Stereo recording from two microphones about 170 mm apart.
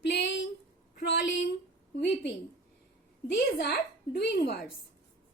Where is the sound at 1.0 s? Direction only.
75° left (ahead or behind).